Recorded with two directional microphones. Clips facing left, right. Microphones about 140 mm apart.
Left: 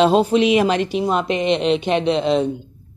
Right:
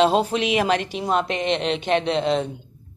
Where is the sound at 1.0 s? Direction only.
5° left (ahead or behind).